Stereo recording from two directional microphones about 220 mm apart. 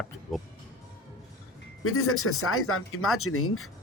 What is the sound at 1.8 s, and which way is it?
Speech, 75° left (ahead or behind).